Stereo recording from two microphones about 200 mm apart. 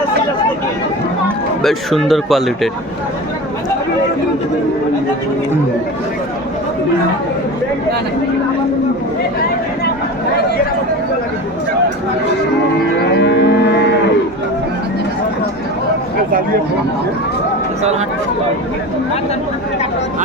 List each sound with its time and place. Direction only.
1.6 s speech: centre (ahead or behind)
13.1 s livestock: 60° left (ahead or behind)